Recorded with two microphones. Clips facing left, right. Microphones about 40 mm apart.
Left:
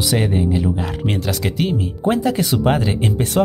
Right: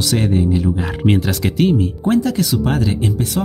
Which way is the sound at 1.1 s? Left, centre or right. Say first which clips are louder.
Right 6 dB; centre.